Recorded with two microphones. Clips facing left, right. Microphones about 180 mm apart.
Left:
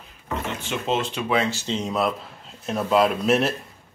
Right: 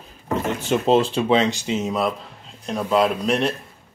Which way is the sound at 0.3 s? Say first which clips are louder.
Right 7 dB; 40° right (ahead or behind).